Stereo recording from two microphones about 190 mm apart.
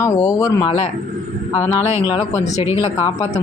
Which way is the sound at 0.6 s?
35° left (ahead or behind).